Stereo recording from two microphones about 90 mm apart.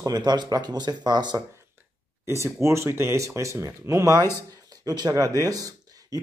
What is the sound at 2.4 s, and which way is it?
Speech, 30° right (ahead or behind).